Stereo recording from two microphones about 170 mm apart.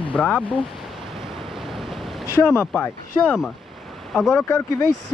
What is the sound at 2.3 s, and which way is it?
Speech, 15° left (ahead or behind).